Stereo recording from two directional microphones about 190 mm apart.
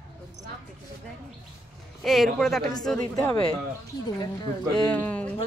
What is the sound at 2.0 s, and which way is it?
Speech, centre (ahead or behind).